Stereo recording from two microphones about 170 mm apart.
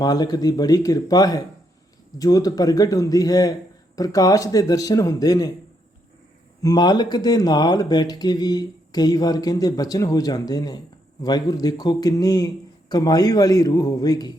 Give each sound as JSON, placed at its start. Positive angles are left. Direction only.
{"t": 0.0, "sound": "speech", "side_deg": 25}
{"t": 6.6, "sound": "speech", "side_deg": 25}